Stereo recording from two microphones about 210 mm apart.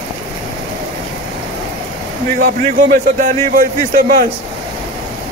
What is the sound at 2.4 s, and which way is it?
A man's voice, 40° right (ahead or behind).